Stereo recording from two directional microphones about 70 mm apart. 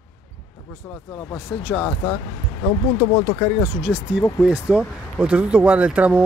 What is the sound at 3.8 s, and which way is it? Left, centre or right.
Speech, centre.